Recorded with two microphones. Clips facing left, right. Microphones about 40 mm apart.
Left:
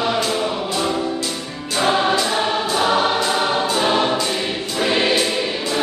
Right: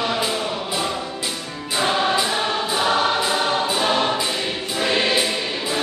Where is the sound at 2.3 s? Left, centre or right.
Centre.